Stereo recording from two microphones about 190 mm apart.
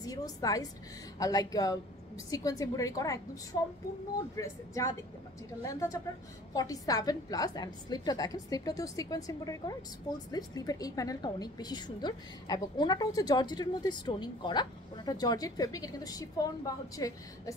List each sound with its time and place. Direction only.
0.0 s a woman's voice: 20° left (ahead or behind)
4.4 s a woman's voice: 15° left (ahead or behind)